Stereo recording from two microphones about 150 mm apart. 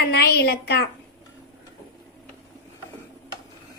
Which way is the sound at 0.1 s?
90° left.